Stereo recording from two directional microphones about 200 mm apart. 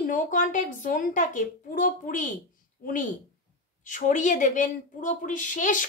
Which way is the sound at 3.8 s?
40° left (ahead or behind).